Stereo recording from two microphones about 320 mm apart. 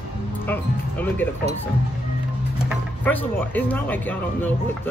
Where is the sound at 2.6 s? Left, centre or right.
Centre.